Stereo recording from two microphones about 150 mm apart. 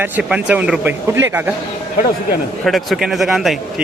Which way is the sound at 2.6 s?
Centre (ahead or behind).